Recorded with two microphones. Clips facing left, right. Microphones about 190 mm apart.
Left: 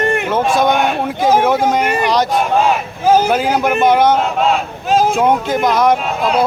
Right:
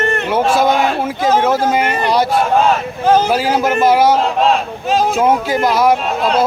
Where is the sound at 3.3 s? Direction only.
5° right (ahead or behind).